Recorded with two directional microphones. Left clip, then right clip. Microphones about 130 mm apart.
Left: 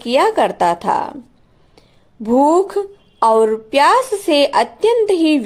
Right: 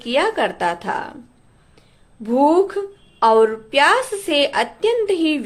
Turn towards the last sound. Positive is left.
turn(degrees=55)  # may be behind; listen again after turning